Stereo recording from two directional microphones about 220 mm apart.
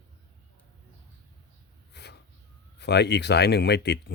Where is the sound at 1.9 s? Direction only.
50° left (ahead or behind).